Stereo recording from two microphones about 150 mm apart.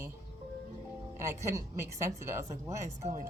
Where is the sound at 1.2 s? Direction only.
20° right (ahead or behind).